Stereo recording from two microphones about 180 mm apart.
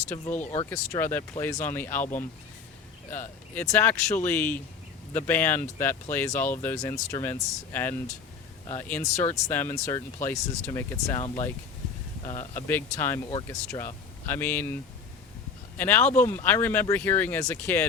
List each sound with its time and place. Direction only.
0.1 s speech: 10° left (ahead or behind)
3.1 s speech: 10° left (ahead or behind)
12.3 s speech: 45° left (ahead or behind)
12.6 s speech: 10° left (ahead or behind)
15.8 s speech: 10° left (ahead or behind)